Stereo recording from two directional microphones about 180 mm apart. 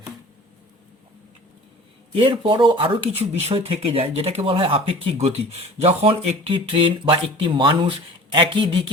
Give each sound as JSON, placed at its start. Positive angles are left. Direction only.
{"t": 2.1, "sound": "speech", "side_deg": -30}